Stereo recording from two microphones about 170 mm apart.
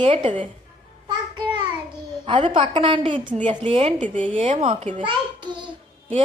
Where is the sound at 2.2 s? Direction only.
35° right (ahead or behind).